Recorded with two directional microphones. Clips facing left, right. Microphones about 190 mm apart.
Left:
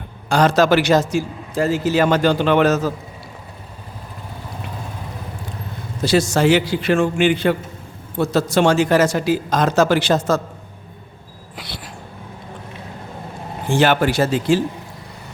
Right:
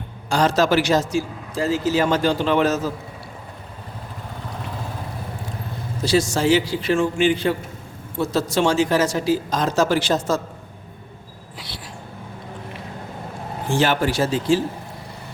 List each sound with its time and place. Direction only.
0.3 s a man's voice: 60° left (ahead or behind)
6.1 s a man's voice: 60° left (ahead or behind)
13.7 s a man's voice: 65° left (ahead or behind)